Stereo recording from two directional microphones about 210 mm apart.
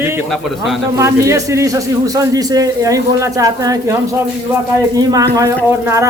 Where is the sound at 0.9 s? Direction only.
15° right (ahead or behind).